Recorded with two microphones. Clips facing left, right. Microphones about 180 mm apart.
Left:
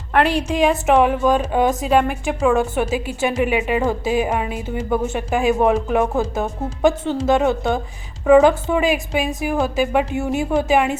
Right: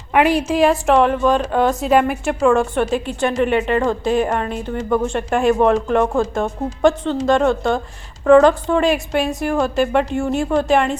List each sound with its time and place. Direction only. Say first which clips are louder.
0.1 s a woman's voice: right 2 dB; 10° right (ahead or behind); by 1.7 s 10° left (ahead or behind)
1.8 s a woman's voice: right 2 dB; 5° right (ahead or behind)